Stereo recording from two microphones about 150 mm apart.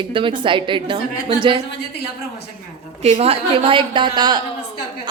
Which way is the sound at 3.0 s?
40° right (ahead or behind).